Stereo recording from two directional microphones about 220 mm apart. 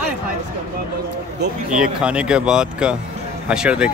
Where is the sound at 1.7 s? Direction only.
5° right (ahead or behind).